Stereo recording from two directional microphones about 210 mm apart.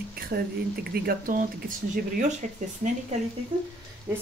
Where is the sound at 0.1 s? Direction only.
45° right (ahead or behind).